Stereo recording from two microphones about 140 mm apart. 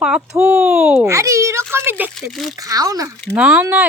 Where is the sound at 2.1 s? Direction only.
Centre (ahead or behind).